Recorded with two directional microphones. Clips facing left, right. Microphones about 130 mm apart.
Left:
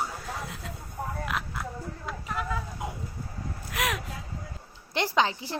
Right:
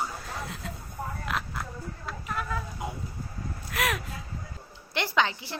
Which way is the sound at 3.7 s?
15° left (ahead or behind).